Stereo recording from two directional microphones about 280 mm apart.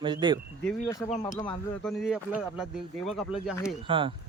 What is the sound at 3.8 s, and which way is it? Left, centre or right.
Speech, centre.